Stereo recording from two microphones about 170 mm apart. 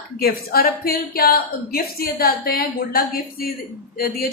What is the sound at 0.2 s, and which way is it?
A woman's voice, 60° left (ahead or behind).